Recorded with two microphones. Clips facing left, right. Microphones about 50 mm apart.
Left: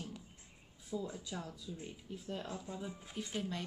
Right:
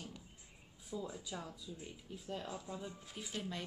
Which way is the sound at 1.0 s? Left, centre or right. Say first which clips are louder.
Left 2 dB; centre.